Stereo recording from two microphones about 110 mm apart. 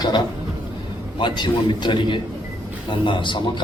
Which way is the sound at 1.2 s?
45° left (ahead or behind).